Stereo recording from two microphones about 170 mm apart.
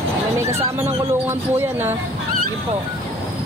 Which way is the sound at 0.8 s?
15° right (ahead or behind).